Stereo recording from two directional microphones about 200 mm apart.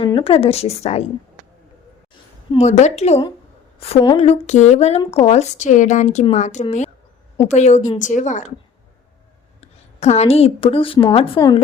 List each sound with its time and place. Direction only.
0.0 s speech: 25° left (ahead or behind)
2.5 s speech: 35° left (ahead or behind)
9.6 s a woman's voice: 35° left (ahead or behind)